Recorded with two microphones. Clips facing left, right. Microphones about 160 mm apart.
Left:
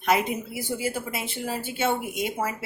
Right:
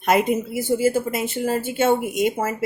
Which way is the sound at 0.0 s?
50° right (ahead or behind).